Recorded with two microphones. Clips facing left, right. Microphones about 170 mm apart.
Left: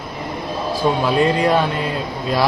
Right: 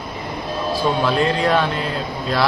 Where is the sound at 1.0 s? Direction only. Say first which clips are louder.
Left 3 dB; 15° left (ahead or behind).